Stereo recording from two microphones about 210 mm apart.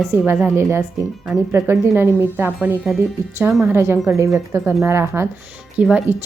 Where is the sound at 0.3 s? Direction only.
10° right (ahead or behind).